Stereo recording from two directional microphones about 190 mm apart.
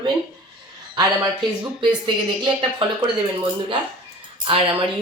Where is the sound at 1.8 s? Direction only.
25° right (ahead or behind).